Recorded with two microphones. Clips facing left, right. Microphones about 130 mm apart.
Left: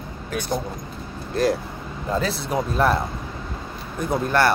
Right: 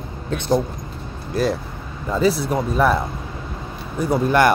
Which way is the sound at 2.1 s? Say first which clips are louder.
Right 5 dB; 5° right (ahead or behind).